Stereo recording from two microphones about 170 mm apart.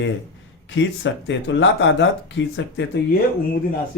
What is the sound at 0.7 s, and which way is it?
Speech, 90° left.